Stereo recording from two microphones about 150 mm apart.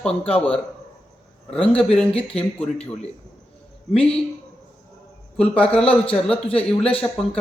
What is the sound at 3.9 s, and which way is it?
Speech, 5° left (ahead or behind).